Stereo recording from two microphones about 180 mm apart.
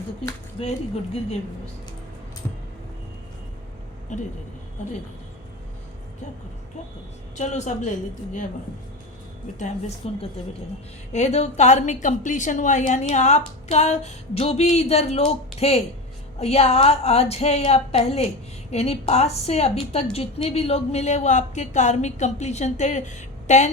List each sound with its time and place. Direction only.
0.6 s a woman's voice: 30° left (ahead or behind)
4.1 s a woman's voice: 40° left (ahead or behind)
7.3 s a woman's voice: 40° left (ahead or behind)
10.0 s a woman's voice: 35° left (ahead or behind)